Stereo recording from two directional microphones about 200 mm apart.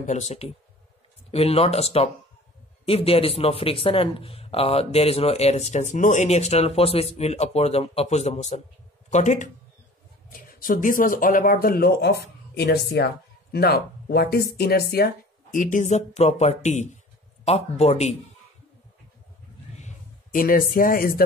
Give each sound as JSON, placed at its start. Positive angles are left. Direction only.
{"t": 0.0, "sound": "speech", "side_deg": 35}
{"t": 20.3, "sound": "speech", "side_deg": 45}